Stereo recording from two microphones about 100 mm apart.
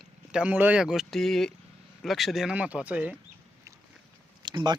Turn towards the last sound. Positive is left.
turn(degrees=-50)  # may be behind; listen again after turning